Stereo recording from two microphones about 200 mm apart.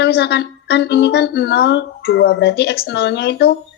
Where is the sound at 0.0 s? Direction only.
55° left (ahead or behind).